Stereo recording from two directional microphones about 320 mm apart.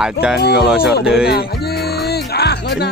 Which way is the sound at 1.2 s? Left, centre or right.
Left.